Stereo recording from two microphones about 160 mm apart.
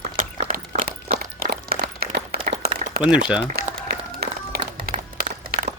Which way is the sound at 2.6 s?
70° right (ahead or behind).